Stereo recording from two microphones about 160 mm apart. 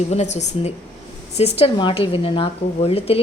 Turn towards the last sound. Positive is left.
turn(degrees=35)  # may be behind; listen again after turning